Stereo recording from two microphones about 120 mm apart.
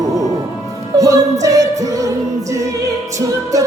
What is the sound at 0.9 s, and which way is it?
Music, 30° right (ahead or behind).